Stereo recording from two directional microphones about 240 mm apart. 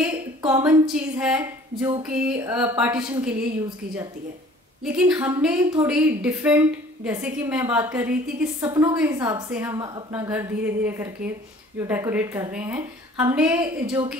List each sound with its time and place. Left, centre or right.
0.4 s a woman's voice: centre
4.8 s speech: centre